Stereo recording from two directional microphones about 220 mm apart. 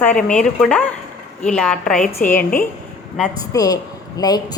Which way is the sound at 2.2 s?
40° left (ahead or behind).